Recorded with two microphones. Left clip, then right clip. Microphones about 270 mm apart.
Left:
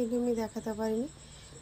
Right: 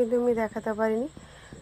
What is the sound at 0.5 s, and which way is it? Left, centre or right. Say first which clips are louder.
Speech: right 7 dB; right.